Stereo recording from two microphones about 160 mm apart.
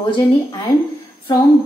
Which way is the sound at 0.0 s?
30° left (ahead or behind).